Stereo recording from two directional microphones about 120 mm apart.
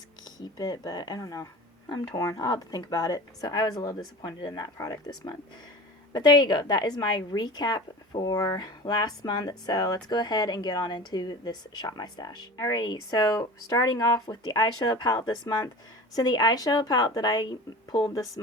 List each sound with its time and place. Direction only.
0.3 s speech: 30° left (ahead or behind)